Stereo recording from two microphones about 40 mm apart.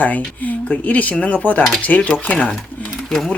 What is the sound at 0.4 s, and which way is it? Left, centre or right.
Speech, left.